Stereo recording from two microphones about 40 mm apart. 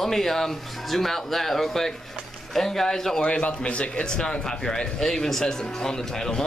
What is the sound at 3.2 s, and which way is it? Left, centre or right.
A man's voice, left.